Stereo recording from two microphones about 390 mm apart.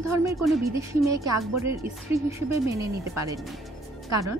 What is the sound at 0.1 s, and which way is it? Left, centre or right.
A woman's voice, centre.